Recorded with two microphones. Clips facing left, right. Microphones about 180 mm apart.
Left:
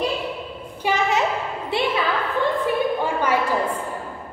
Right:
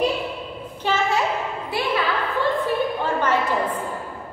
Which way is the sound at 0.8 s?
15° left (ahead or behind).